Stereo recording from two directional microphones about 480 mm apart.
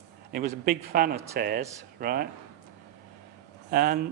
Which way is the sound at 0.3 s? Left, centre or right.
Centre.